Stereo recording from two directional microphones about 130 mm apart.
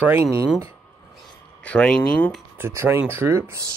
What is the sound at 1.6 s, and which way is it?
Speech, 5° left (ahead or behind).